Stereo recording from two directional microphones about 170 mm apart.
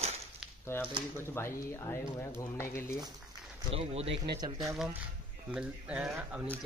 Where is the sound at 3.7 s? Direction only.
35° right (ahead or behind).